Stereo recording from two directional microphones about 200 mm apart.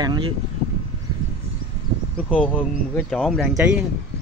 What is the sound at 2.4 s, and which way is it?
Speech, 10° left (ahead or behind).